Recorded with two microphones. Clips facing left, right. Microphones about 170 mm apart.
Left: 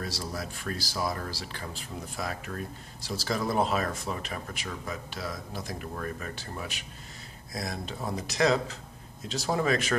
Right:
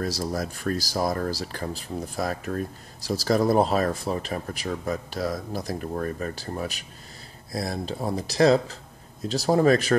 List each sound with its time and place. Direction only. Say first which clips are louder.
0.0 s speech: right 7 dB; 40° right (ahead or behind)